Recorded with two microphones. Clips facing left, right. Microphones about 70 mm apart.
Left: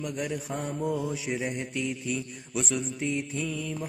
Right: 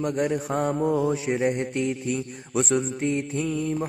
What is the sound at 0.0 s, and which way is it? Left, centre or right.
Mantra, right.